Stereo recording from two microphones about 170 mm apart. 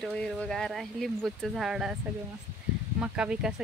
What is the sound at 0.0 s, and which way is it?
Speech, 5° left (ahead or behind).